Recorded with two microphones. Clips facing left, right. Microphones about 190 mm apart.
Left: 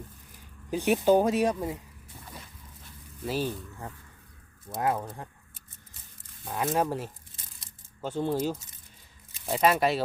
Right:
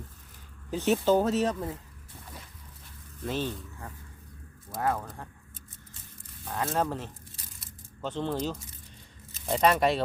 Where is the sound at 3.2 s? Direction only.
10° left (ahead or behind).